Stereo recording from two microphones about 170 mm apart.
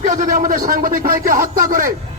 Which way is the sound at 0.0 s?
50° right (ahead or behind).